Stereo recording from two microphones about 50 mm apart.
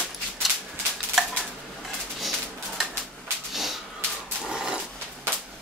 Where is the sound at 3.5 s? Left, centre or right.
Centre.